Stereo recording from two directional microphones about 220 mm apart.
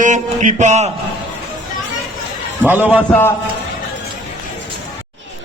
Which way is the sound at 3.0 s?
10° left (ahead or behind).